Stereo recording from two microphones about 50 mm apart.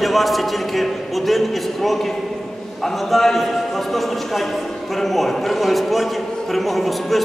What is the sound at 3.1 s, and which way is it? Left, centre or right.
Speech, centre.